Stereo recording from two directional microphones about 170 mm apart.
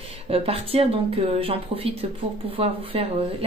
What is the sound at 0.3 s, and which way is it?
A woman's voice, 35° right (ahead or behind).